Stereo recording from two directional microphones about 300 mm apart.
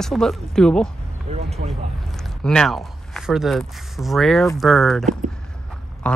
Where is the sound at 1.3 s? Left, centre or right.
Right.